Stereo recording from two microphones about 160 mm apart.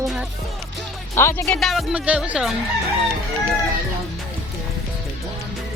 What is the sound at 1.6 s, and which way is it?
Speech, centre (ahead or behind).